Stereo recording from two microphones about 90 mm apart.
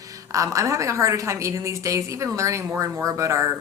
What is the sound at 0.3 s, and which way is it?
A woman's voice, 35° right (ahead or behind).